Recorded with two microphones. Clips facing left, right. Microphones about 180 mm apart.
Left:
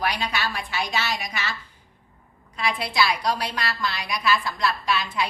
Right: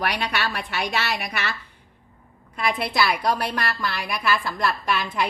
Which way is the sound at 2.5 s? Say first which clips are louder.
Right 1 dB; 55° right (ahead or behind).